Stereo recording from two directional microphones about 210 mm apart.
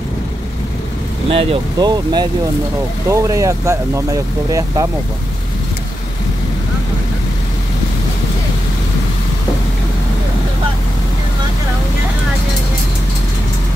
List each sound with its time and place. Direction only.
1.3 s speech: 25° right (ahead or behind)